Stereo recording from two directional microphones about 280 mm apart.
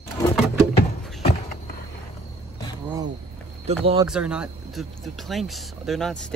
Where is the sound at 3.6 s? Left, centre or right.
Centre.